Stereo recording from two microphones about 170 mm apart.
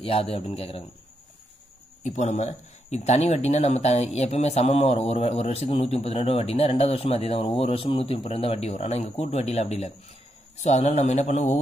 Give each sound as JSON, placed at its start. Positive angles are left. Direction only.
{"t": 0.0, "sound": "speech", "side_deg": 35}
{"t": 2.0, "sound": "speech", "side_deg": 45}